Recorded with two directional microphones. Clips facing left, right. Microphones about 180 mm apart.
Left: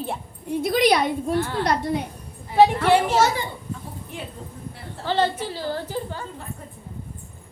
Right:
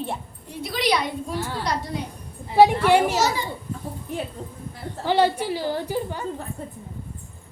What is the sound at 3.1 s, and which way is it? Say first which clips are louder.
Speech: left 3 dB; 55° left (ahead or behind).